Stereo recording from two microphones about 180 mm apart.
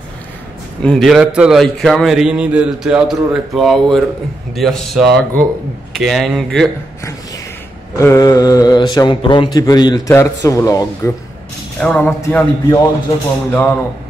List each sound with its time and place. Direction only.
0.8 s a man's voice: centre (ahead or behind)
8.0 s speech: 20° left (ahead or behind)
11.8 s a man's voice: 5° left (ahead or behind)